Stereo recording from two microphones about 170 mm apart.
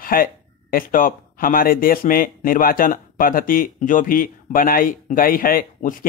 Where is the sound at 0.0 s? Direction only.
55° left (ahead or behind).